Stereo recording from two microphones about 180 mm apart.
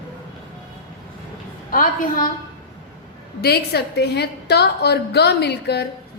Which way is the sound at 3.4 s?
65° left (ahead or behind).